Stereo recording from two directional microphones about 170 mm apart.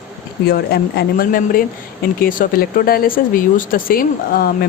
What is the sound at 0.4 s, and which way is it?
Speech, 65° left (ahead or behind).